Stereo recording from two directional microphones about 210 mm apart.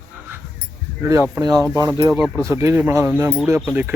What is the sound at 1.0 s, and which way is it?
Speech, 15° right (ahead or behind).